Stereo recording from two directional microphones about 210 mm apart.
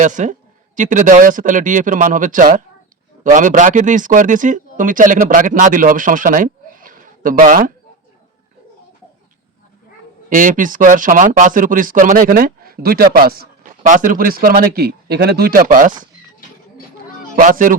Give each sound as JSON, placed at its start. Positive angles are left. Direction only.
{"t": 0.0, "sound": "speech", "side_deg": -35}
{"t": 10.2, "sound": "speech", "side_deg": -40}
{"t": 17.3, "sound": "speech", "side_deg": -40}